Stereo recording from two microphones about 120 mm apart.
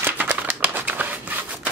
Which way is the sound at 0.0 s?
20° right (ahead or behind).